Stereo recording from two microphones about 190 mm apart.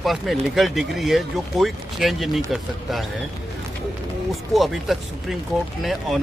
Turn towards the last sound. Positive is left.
turn(degrees=0)  # may be behind; listen again after turning